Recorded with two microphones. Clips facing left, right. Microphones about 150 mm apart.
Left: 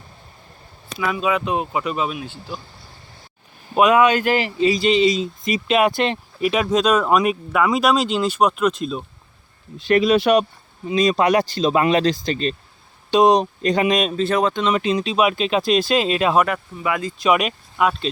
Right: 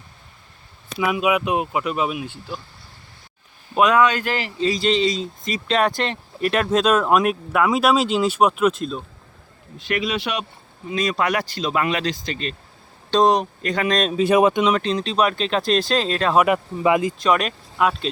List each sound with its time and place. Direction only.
0.9 s speech: 15° right (ahead or behind)
3.8 s speech: 5° left (ahead or behind)
4.7 s speech: 5° left (ahead or behind)
9.7 s speech: 35° left (ahead or behind)
10.8 s speech: 20° left (ahead or behind)
13.1 s speech: 10° left (ahead or behind)
13.4 s speech: 25° left (ahead or behind)
13.9 s speech: 5° left (ahead or behind)
14.2 s speech: 15° right (ahead or behind)
14.7 s speech: 10° left (ahead or behind)
16.8 s speech: 20° right (ahead or behind)
17.2 s speech: 5° left (ahead or behind)